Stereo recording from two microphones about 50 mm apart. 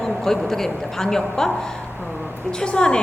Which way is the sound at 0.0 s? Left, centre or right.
Centre.